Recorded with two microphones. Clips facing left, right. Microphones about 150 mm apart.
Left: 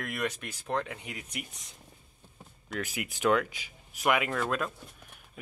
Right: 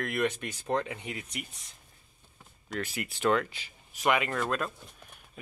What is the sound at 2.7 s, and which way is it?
Speech, 10° left (ahead or behind).